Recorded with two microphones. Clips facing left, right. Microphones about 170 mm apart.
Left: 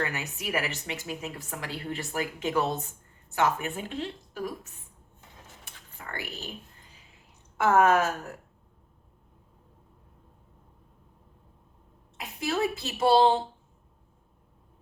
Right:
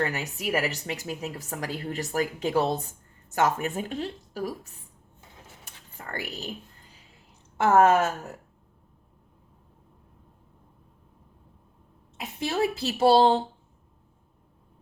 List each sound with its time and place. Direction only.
0.0 s a woman's voice: 40° right (ahead or behind)
5.6 s keys jangling: 40° right (ahead or behind)
7.6 s a woman's voice: 30° right (ahead or behind)
12.1 s a woman's voice: 30° right (ahead or behind)